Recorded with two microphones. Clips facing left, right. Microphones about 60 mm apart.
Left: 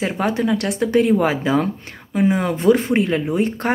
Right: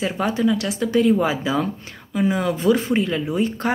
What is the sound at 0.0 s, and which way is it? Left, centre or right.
A woman's voice, left.